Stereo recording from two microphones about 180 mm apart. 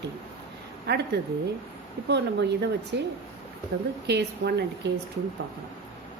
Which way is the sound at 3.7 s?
60° right (ahead or behind).